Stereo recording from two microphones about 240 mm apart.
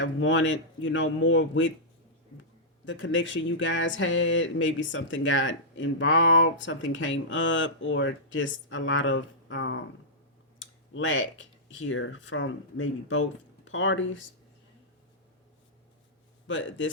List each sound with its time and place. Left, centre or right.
0.0 s speech: left
16.5 s speech: left